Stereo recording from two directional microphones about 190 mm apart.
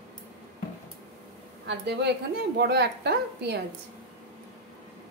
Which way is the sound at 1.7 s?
65° right (ahead or behind).